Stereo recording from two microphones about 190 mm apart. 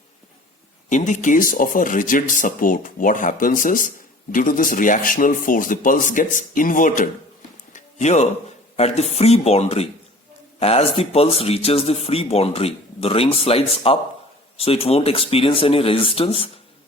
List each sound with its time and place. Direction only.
0.9 s speech: 40° left (ahead or behind)
7.7 s a sound: 40° left (ahead or behind)
8.7 s speech: 35° left (ahead or behind)